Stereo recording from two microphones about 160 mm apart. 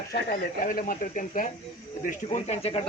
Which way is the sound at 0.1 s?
65° left (ahead or behind).